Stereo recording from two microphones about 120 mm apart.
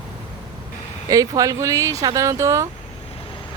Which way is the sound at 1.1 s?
30° right (ahead or behind).